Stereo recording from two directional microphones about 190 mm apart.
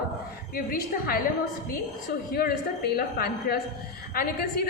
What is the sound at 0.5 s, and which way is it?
Speech, 50° left (ahead or behind).